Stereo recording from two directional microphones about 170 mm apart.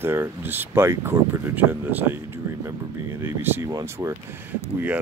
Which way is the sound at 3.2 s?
15° right (ahead or behind).